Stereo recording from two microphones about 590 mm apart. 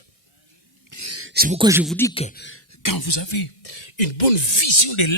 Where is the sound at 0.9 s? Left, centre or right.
Right; by 2.6 s centre.